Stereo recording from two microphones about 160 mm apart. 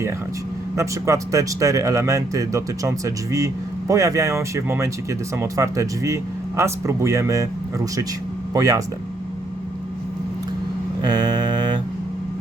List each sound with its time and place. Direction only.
0.8 s speech: 20° right (ahead or behind)
8.5 s speech: 20° right (ahead or behind)
11.0 s a sound: 25° right (ahead or behind)